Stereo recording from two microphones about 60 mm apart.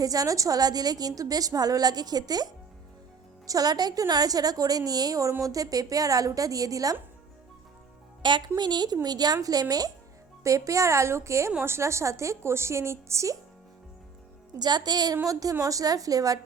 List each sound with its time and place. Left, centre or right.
0.0 s a woman's voice: right
3.4 s a woman's voice: right
8.9 s a woman's voice: right
10.4 s a woman's voice: right
15.0 s a woman's voice: right